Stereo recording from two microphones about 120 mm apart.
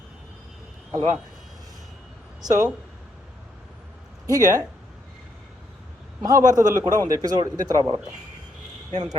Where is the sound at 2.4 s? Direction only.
30° right (ahead or behind).